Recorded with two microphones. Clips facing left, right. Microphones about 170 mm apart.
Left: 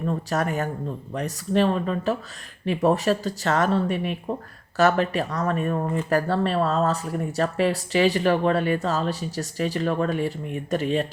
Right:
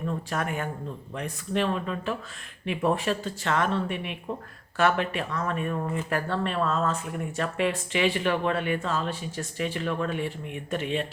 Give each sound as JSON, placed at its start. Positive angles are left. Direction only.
{"t": 0.0, "sound": "speech", "side_deg": 40}